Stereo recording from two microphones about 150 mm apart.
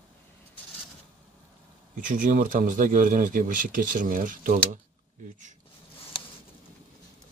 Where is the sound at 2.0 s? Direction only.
60° right (ahead or behind).